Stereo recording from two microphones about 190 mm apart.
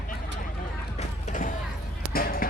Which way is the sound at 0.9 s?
40° left (ahead or behind).